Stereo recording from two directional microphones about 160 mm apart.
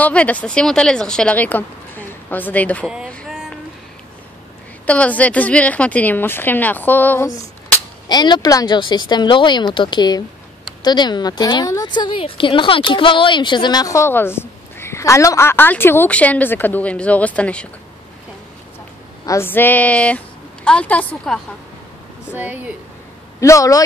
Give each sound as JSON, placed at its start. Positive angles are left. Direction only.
{"t": 0.0, "sound": "speech", "side_deg": 10}
{"t": 3.1, "sound": "vehicle", "side_deg": 0}
{"t": 4.8, "sound": "speech", "side_deg": 10}
{"t": 8.1, "sound": "a woman's voice", "side_deg": 25}
{"t": 19.2, "sound": "speech", "side_deg": 15}
{"t": 22.3, "sound": "speech", "side_deg": -10}
{"t": 23.4, "sound": "a woman's voice", "side_deg": 20}